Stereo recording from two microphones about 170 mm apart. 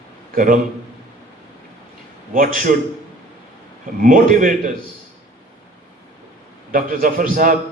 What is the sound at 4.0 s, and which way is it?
Speech, 50° right (ahead or behind).